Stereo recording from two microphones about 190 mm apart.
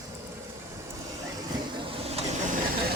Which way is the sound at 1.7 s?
30° right (ahead or behind).